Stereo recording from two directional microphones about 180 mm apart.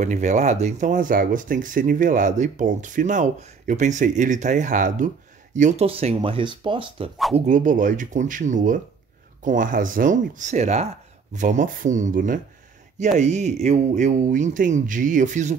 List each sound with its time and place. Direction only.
0.0 s speech: 40° right (ahead or behind)
7.3 s speech: 45° right (ahead or behind)